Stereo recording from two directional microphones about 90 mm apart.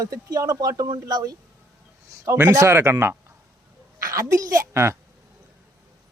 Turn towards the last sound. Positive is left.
turn(degrees=-30)  # may be behind; listen again after turning